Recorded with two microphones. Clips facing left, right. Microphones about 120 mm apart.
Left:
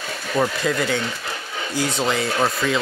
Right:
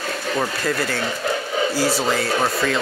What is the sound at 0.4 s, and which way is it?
Speech, 5° left (ahead or behind).